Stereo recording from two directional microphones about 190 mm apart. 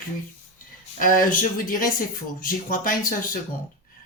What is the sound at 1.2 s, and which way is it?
Speech, 45° left (ahead or behind).